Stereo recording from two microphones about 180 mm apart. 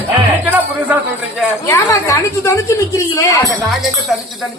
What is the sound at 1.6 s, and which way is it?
A woman's voice, 15° left (ahead or behind).